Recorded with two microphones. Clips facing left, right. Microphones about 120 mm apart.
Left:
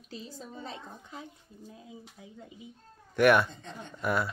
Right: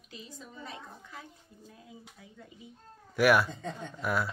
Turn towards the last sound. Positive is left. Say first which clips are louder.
# left 1 dB
turn(degrees=0)  # may be behind; listen again after turning